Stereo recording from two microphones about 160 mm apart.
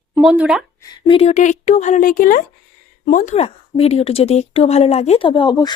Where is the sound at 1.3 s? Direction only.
50° left (ahead or behind).